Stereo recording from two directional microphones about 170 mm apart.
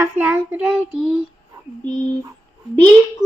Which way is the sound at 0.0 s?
10° right (ahead or behind).